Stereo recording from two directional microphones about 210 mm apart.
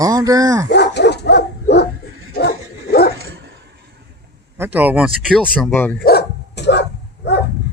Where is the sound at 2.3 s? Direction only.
50° left (ahead or behind).